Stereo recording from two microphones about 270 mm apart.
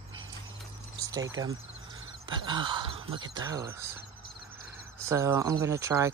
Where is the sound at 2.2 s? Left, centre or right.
Centre.